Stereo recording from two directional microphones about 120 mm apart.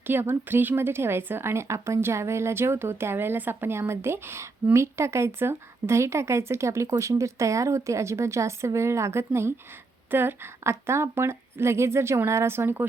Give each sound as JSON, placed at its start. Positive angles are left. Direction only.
{"t": 0.1, "sound": "a woman's voice", "side_deg": -20}